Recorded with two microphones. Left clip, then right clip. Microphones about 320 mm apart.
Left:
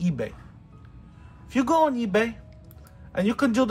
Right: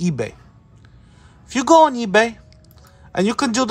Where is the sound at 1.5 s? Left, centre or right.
Right.